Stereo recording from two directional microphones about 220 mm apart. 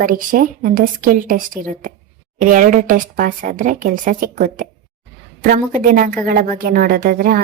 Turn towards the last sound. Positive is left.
turn(degrees=-40)  # may be behind; listen again after turning